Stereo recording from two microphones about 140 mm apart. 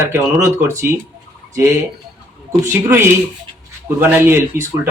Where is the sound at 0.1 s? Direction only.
20° right (ahead or behind).